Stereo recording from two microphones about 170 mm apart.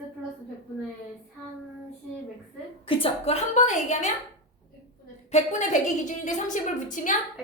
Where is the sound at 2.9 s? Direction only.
35° left (ahead or behind).